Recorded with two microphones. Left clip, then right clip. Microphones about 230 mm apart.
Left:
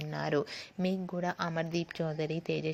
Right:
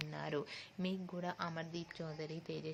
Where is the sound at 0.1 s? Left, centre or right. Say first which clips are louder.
Left 10 dB; left.